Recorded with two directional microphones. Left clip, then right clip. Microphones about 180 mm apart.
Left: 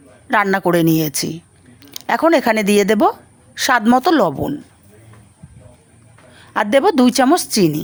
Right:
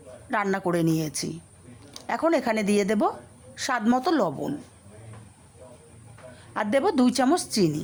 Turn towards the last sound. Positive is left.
turn(degrees=35)  # may be behind; listen again after turning